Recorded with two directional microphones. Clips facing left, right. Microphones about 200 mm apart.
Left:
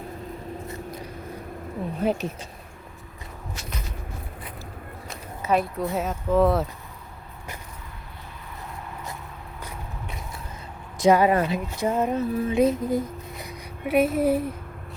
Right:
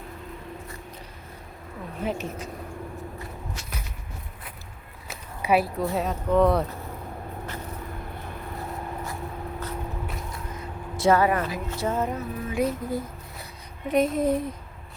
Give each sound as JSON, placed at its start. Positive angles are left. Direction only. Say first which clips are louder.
{"t": 2.0, "sound": "a woman's voice", "louder": "left 3 dB", "side_deg": 35}
{"t": 5.4, "sound": "a sound", "louder": "right 1 dB", "side_deg": -10}
{"t": 5.9, "sound": "speech", "louder": "left 1 dB", "side_deg": 0}
{"t": 10.9, "sound": "speech", "louder": "left 2 dB", "side_deg": 15}
{"t": 11.3, "sound": "a sound", "louder": "left 4 dB", "side_deg": 25}
{"t": 13.8, "sound": "speech", "louder": "left 2 dB", "side_deg": 5}